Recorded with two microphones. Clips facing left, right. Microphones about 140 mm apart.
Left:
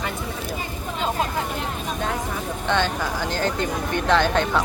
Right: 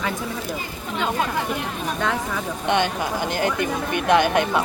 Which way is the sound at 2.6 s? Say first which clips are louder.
Right 2 dB; 15° right (ahead or behind).